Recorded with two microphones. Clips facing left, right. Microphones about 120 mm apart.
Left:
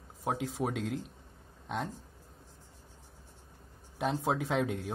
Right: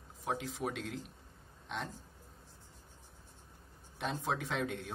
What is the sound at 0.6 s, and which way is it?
Speech, 40° left (ahead or behind).